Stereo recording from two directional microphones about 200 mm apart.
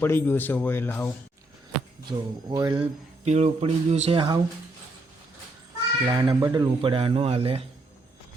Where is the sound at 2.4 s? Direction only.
20° right (ahead or behind).